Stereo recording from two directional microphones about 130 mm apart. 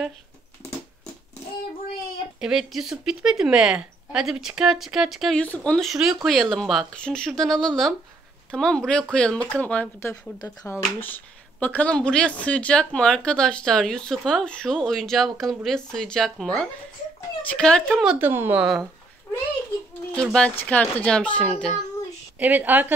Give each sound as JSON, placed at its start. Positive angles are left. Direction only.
{"t": 2.4, "sound": "a woman's voice", "side_deg": -5}
{"t": 5.4, "sound": "a child's voice", "side_deg": 10}
{"t": 10.4, "sound": "speech", "side_deg": 25}
{"t": 11.0, "sound": "a woman's voice", "side_deg": 15}
{"t": 18.0, "sound": "a woman's voice", "side_deg": -15}
{"t": 20.3, "sound": "a child's voice", "side_deg": 10}
{"t": 22.4, "sound": "a woman's voice", "side_deg": -15}